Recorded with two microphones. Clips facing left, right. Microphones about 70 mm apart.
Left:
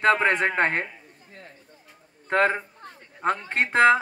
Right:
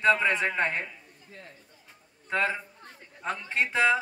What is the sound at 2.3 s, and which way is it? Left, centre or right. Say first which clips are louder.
Speech: left 6 dB; left.